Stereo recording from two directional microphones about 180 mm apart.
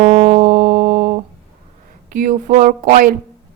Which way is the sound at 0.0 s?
45° right (ahead or behind).